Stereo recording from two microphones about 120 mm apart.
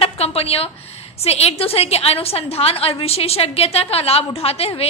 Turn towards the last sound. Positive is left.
turn(degrees=55)  # may be behind; listen again after turning